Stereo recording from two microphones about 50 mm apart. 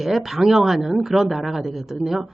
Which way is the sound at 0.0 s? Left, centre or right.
Centre.